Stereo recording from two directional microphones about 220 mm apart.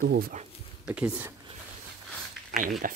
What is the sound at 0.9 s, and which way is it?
Speech, 5° right (ahead or behind).